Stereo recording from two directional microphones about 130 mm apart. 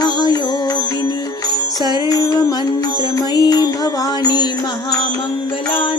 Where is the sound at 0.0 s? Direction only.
30° left (ahead or behind).